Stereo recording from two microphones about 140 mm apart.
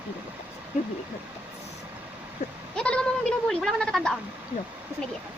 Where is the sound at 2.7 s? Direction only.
5° left (ahead or behind).